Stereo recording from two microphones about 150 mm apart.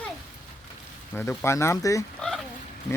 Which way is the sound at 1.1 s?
15° left (ahead or behind).